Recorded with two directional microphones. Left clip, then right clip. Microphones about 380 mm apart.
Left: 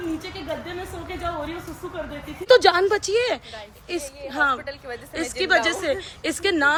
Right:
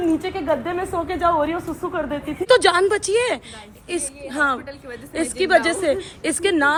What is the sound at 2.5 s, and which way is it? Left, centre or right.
A woman's voice, right.